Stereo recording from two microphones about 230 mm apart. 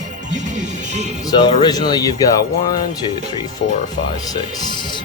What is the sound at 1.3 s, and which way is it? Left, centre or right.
Speech, left.